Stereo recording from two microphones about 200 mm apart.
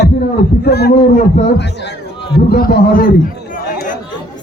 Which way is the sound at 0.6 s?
50° left (ahead or behind).